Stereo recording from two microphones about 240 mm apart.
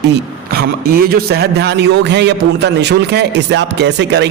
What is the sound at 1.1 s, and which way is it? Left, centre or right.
A man's voice, right.